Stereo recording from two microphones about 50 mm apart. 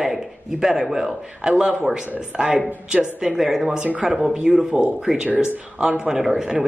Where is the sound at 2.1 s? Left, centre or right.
Centre.